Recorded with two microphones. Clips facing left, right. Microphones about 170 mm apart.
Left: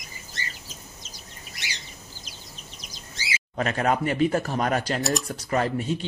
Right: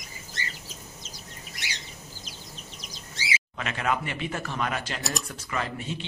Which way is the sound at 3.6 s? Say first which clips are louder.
Left 6 dB; 40° left (ahead or behind).